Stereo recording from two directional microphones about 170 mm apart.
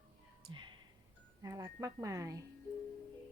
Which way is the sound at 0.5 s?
25° right (ahead or behind).